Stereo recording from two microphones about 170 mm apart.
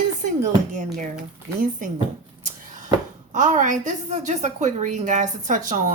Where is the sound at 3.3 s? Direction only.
45° right (ahead or behind).